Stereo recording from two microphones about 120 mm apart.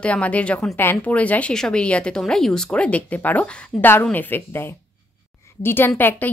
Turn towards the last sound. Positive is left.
turn(degrees=15)  # may be behind; listen again after turning